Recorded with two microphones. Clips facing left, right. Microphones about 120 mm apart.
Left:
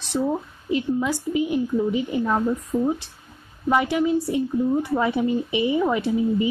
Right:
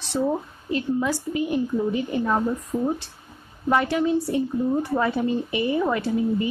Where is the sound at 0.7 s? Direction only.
15° left (ahead or behind).